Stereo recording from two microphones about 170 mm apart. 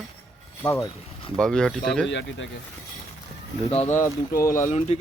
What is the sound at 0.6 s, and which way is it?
Speech, 15° left (ahead or behind).